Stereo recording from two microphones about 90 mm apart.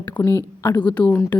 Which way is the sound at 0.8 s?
15° left (ahead or behind).